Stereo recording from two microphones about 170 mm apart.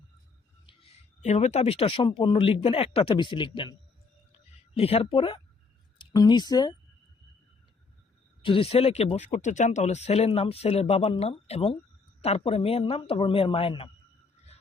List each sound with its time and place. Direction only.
0.7 s speech: 35° left (ahead or behind)
8.4 s speech: 35° left (ahead or behind)